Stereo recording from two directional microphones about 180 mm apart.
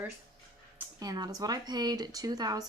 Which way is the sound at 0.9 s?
20° right (ahead or behind).